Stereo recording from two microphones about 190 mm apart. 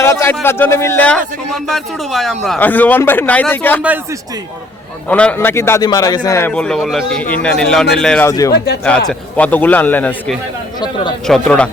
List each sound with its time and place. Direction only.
0.0 s a man's voice: 15° left (ahead or behind)
5.0 s a man's voice: 5° left (ahead or behind)
8.3 s a man's voice: 20° left (ahead or behind)
8.5 s speech: 60° left (ahead or behind)
8.8 s a man's voice: 5° left (ahead or behind)